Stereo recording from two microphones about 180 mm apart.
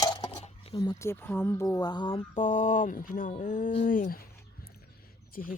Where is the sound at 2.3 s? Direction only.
40° left (ahead or behind).